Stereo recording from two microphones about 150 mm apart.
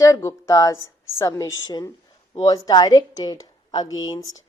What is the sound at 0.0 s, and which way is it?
A woman's voice, 20° left (ahead or behind).